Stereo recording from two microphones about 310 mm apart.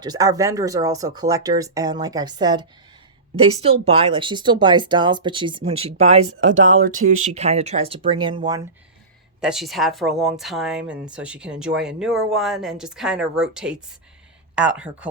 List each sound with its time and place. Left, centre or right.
0.0 s speech: centre
6.5 s speech: right
6.8 s speech: right
9.4 s a woman's voice: centre